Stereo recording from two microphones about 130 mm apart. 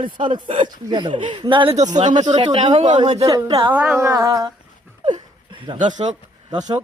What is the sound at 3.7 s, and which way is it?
Speech, 10° right (ahead or behind).